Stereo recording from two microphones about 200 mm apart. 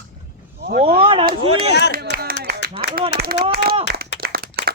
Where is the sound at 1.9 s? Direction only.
50° right (ahead or behind).